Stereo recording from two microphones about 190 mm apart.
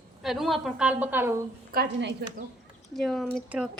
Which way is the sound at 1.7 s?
60° right (ahead or behind).